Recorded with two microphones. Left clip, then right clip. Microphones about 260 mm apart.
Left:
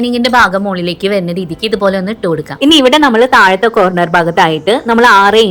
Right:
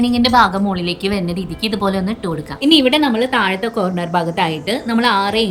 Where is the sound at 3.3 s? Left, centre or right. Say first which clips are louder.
Left 10 dB; left.